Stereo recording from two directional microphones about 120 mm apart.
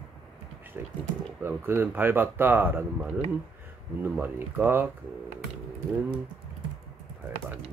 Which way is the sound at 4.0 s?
15° right (ahead or behind).